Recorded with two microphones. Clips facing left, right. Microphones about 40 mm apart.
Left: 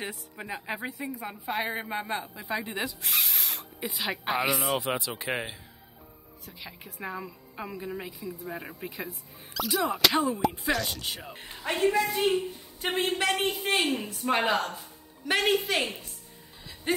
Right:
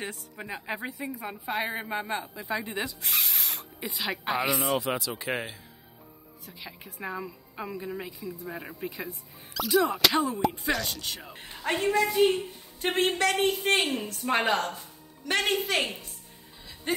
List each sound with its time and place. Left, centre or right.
0.0 s a woman's voice: centre
4.7 s speech: left
5.3 s a woman's voice: centre
13.5 s a woman's voice: centre
13.9 s speech: centre
14.2 s speech: centre
16.9 s a sound: centre